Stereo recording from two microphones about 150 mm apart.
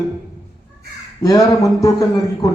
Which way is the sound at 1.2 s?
20° left (ahead or behind).